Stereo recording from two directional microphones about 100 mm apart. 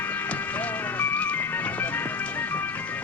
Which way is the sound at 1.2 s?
20° left (ahead or behind).